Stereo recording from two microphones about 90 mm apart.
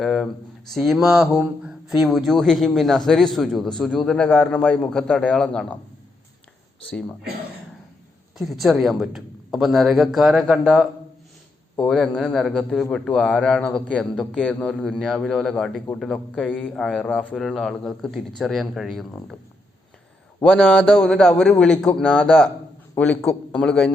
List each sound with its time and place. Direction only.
0.0 s a sound: 5° left (ahead or behind)
0.8 s a man's voice: centre (ahead or behind)
4.3 s a man's voice: 20° left (ahead or behind)
8.4 s a man's voice: centre (ahead or behind)
11.8 s a man's voice: 5° left (ahead or behind)
17.3 s a man's voice: centre (ahead or behind)
20.4 s a man's voice: 15° left (ahead or behind)
21.1 s a man's voice: centre (ahead or behind)
23.0 s a man's voice: 20° left (ahead or behind)